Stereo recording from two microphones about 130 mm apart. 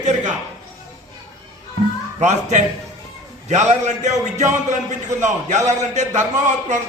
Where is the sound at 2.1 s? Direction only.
65° right (ahead or behind).